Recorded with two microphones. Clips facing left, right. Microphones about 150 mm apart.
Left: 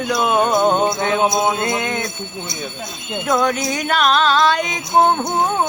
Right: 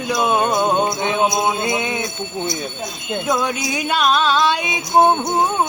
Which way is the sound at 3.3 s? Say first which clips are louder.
Left 4 dB; 5° right (ahead or behind).